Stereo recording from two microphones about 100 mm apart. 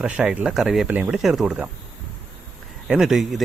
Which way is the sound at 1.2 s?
5° right (ahead or behind).